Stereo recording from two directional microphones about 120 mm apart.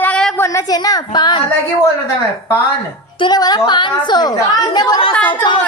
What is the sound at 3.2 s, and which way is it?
A woman's voice, 35° left (ahead or behind).